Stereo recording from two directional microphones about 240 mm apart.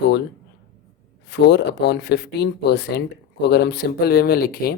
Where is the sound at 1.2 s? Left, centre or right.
Left.